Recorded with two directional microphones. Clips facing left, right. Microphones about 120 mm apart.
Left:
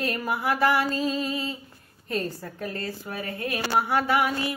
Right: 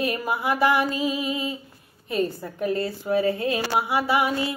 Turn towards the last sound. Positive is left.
turn(degrees=-20)  # may be behind; listen again after turning